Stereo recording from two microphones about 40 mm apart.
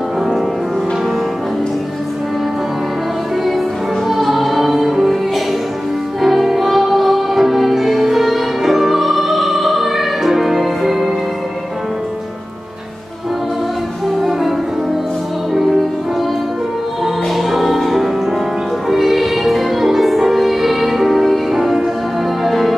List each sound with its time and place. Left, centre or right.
4.1 s music: centre
17.0 s music: centre